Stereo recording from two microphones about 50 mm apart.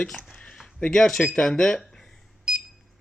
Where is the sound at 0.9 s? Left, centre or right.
Centre.